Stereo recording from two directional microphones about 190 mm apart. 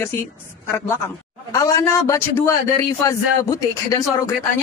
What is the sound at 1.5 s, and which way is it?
Speech, 15° left (ahead or behind).